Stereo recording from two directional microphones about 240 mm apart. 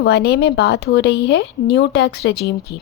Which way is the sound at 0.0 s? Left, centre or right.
Left.